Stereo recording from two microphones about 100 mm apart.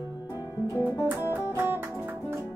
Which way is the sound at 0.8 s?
20° right (ahead or behind).